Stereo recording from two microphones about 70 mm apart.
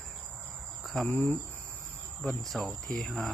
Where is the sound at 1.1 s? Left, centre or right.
Left.